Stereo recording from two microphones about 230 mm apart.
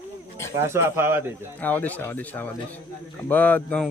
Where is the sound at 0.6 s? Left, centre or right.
Centre.